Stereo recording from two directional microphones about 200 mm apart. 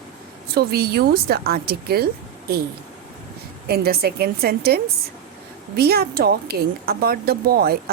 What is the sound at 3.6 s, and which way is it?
A woman's voice, 50° right (ahead or behind).